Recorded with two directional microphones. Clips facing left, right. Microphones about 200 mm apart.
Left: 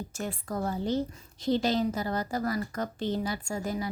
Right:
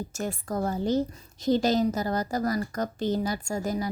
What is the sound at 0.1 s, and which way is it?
A woman's voice, 45° right (ahead or behind).